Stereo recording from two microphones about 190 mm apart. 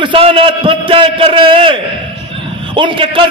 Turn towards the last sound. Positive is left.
turn(degrees=-25)  # may be behind; listen again after turning